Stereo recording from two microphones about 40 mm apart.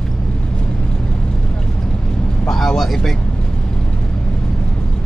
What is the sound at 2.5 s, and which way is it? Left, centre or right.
Vehicle, centre.